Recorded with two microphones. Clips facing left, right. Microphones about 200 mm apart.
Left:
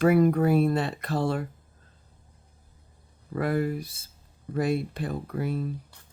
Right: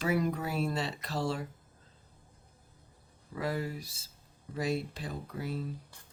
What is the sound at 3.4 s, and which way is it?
Speech, 55° left (ahead or behind).